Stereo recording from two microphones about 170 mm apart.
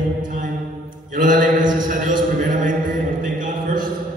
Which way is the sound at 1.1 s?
50° right (ahead or behind).